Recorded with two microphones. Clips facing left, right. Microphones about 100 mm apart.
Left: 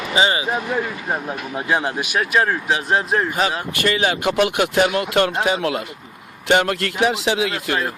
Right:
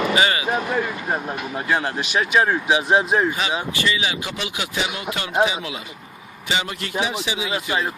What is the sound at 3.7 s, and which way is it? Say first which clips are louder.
A man's voice: left 4 dB; 50° left (ahead or behind).